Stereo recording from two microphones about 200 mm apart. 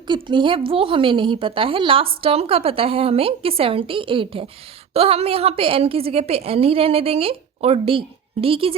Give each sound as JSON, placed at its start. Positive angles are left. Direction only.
{"t": 0.1, "sound": "a woman's voice", "side_deg": -25}